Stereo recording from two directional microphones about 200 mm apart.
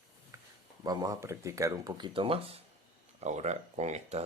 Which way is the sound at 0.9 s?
15° right (ahead or behind).